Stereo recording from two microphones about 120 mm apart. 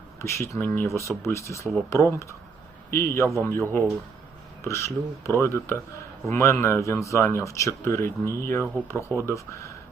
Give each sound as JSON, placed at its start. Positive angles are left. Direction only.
{"t": 0.2, "sound": "speech", "side_deg": 20}